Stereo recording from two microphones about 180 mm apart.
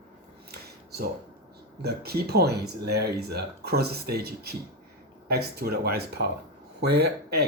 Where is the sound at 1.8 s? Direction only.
60° right (ahead or behind).